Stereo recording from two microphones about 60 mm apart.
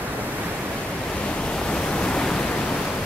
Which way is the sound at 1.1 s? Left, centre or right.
Centre.